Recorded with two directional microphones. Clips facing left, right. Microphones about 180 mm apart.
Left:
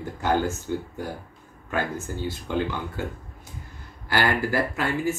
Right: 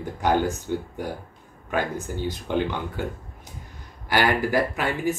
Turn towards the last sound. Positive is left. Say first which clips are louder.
# even
turn(degrees=-20)  # may be behind; listen again after turning